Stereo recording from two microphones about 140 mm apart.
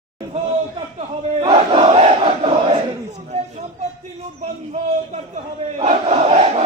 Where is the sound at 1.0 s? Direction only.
40° right (ahead or behind).